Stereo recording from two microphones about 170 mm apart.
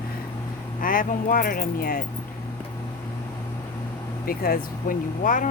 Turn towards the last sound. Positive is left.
turn(degrees=50)  # may be behind; listen again after turning